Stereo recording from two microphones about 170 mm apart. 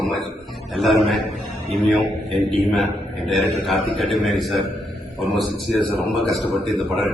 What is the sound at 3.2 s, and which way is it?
A man's voice, centre (ahead or behind).